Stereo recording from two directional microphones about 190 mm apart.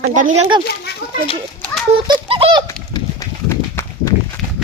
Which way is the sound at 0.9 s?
55° left (ahead or behind).